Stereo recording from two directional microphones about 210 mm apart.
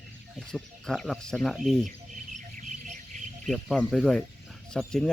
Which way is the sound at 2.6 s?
35° right (ahead or behind).